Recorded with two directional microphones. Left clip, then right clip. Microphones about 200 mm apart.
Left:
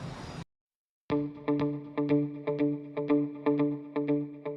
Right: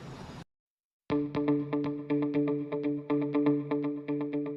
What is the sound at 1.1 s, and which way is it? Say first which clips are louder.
Music: even; centre (ahead or behind).